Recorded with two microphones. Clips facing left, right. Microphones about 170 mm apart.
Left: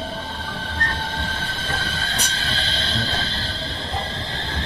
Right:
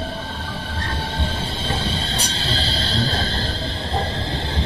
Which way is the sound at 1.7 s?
20° right (ahead or behind).